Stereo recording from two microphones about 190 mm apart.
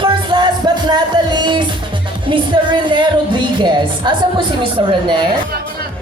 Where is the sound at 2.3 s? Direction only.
25° right (ahead or behind).